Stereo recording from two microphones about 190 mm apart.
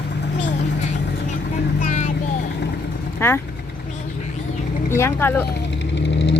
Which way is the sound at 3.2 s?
10° left (ahead or behind).